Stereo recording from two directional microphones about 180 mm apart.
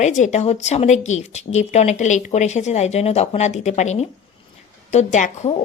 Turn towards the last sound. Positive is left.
turn(degrees=40)  # may be behind; listen again after turning